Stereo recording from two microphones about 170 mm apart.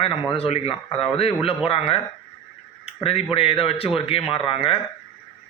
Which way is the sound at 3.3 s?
35° left (ahead or behind).